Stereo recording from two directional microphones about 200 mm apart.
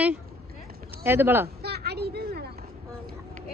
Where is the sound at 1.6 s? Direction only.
55° right (ahead or behind).